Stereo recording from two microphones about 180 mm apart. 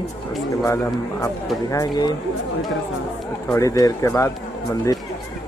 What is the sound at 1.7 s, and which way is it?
Speech, 20° left (ahead or behind).